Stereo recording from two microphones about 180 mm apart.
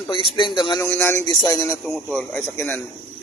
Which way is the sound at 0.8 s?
10° left (ahead or behind).